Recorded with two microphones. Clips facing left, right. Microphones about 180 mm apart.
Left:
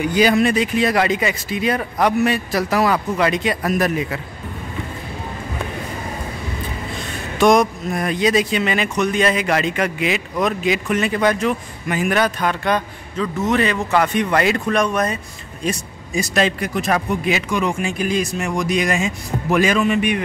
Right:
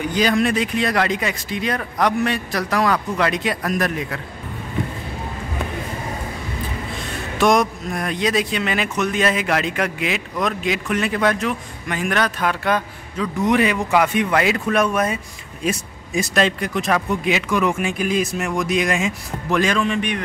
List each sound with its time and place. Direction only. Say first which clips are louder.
0.0 s speech: left 3 dB; 10° left (ahead or behind)
7.3 s speech: left 3 dB; centre (ahead or behind)